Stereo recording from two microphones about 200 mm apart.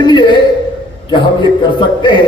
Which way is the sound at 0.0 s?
20° left (ahead or behind).